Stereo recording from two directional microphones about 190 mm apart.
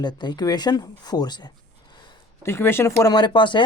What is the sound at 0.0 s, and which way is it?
A woman's voice, 20° left (ahead or behind).